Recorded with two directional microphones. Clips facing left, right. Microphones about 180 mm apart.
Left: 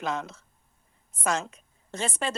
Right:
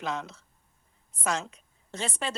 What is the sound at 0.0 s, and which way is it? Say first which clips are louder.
A woman's voice: left 2 dB; 50° left (ahead or behind).